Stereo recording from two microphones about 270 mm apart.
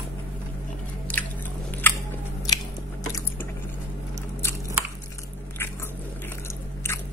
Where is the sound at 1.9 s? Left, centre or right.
Centre.